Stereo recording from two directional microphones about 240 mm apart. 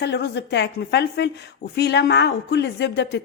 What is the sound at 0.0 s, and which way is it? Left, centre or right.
A woman's voice, left.